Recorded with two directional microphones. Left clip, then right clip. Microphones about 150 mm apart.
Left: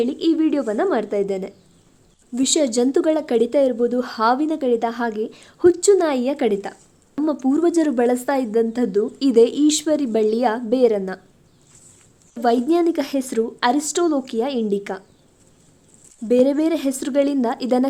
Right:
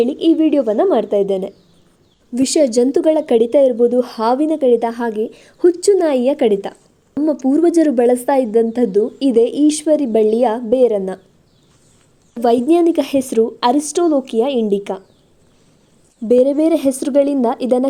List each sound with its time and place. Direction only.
0.0 s a woman's voice: 10° right (ahead or behind)
12.4 s a woman's voice: 20° right (ahead or behind)
16.3 s speech: 20° right (ahead or behind)